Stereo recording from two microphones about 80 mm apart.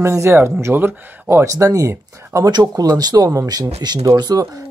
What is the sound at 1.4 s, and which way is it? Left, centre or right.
Speech, right.